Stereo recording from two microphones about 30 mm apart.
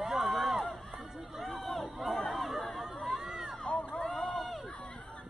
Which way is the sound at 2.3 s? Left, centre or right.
Centre.